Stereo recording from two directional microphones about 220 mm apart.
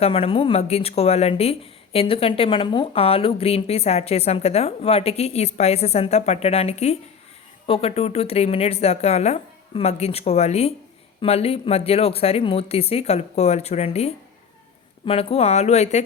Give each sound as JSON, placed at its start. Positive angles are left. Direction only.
{"t": 0.0, "sound": "speech", "side_deg": 25}